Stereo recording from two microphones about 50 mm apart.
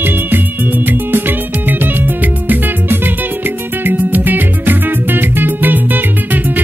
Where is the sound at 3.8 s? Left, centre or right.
Right.